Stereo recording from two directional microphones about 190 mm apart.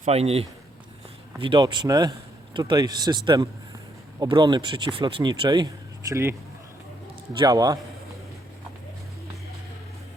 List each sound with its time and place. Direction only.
0.0 s a man's voice: 35° right (ahead or behind); by 6.3 s 15° right (ahead or behind)
7.3 s speech: 20° right (ahead or behind)